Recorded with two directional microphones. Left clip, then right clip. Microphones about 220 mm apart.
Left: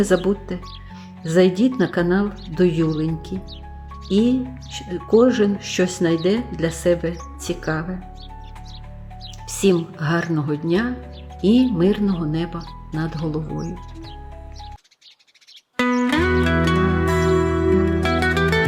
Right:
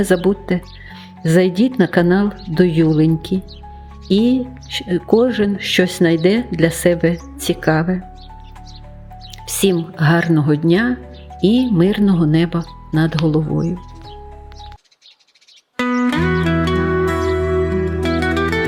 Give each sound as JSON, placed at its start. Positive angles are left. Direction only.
{"t": 0.0, "sound": "speech", "side_deg": -35}
{"t": 9.5, "sound": "speech", "side_deg": -35}
{"t": 15.8, "sound": "music", "side_deg": 0}
{"t": 18.0, "sound": "music", "side_deg": 0}